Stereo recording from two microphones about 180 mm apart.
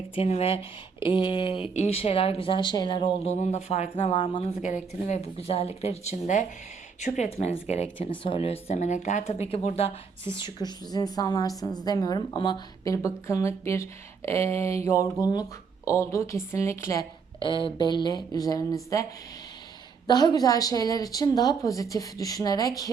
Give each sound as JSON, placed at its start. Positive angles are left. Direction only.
{"t": 0.2, "sound": "a woman's voice", "side_deg": 35}
{"t": 3.4, "sound": "speech", "side_deg": 40}
{"t": 4.6, "sound": "a woman's voice", "side_deg": 40}
{"t": 17.4, "sound": "a woman's voice", "side_deg": 25}
{"t": 20.1, "sound": "a woman's voice", "side_deg": 20}